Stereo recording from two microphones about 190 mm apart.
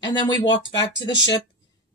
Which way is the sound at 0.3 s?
20° left (ahead or behind).